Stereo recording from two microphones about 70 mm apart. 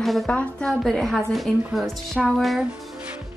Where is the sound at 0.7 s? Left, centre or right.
Centre.